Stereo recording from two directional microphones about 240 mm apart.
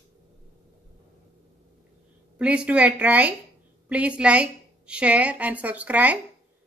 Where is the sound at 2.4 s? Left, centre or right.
Centre.